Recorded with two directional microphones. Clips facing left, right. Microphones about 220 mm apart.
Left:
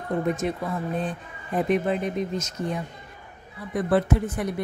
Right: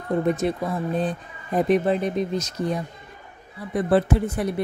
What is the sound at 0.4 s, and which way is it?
Speech, 35° right (ahead or behind).